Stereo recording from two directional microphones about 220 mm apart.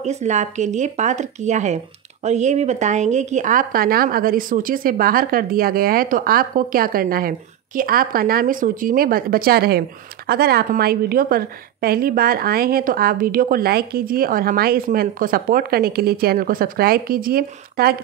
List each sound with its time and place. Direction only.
0.0 s a woman's voice: 30° right (ahead or behind)